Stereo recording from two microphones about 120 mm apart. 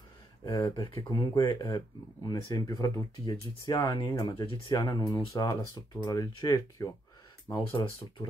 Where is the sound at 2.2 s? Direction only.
30° left (ahead or behind).